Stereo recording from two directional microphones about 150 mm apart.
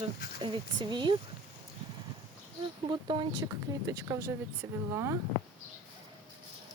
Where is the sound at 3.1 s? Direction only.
30° right (ahead or behind).